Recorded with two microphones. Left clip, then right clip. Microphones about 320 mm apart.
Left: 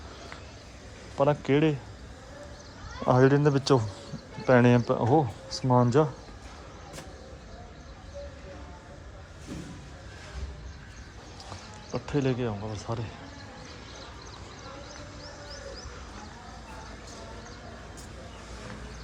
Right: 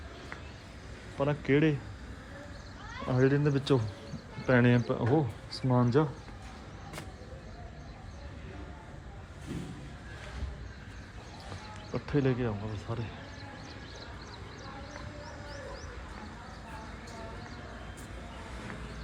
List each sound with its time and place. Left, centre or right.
1.2 s speech: centre
3.1 s speech: centre
11.9 s speech: centre